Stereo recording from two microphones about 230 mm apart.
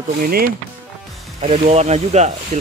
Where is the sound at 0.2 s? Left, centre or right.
Right.